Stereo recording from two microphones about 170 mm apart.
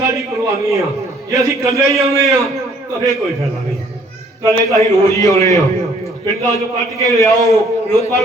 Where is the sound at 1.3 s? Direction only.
20° right (ahead or behind).